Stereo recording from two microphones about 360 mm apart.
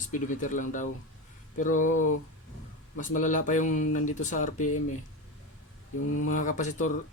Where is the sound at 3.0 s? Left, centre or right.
Left.